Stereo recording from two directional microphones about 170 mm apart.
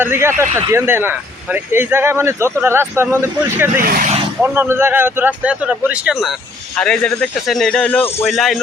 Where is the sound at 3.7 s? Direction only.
55° right (ahead or behind).